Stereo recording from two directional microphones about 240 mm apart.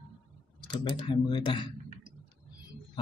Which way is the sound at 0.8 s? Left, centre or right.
Centre.